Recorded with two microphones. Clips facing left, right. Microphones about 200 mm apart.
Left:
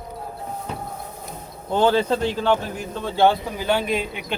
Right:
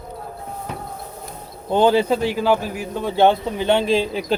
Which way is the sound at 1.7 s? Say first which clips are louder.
Right 3 dB; 15° right (ahead or behind).